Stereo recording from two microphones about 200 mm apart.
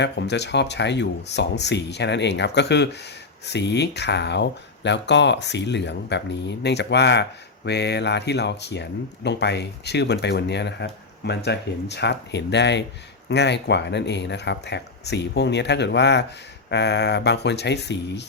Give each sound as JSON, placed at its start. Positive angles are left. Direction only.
{"t": 0.0, "sound": "speech", "side_deg": 60}